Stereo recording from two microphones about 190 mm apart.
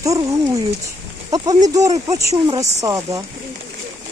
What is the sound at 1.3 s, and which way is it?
Speech, 20° right (ahead or behind).